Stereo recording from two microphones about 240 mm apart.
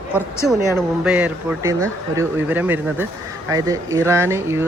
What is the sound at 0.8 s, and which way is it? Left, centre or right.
A man's voice, centre.